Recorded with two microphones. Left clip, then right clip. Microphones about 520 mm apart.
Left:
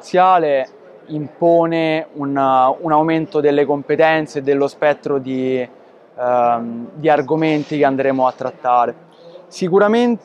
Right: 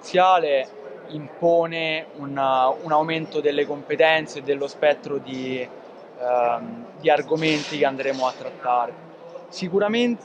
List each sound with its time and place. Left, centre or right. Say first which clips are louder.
0.1 s a man's voice: left 5 dB; left